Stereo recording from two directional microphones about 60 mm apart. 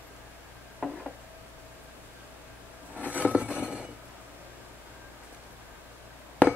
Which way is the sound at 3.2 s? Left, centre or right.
Centre.